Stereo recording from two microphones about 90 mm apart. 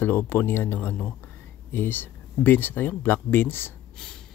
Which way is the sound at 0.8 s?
10° left (ahead or behind).